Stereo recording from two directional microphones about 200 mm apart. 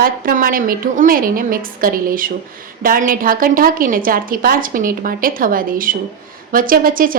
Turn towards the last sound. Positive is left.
turn(degrees=-45)  # may be behind; listen again after turning